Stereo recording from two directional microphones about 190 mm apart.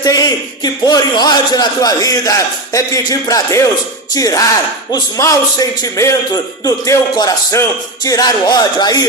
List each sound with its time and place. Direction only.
0.0 s a man's voice: 20° left (ahead or behind)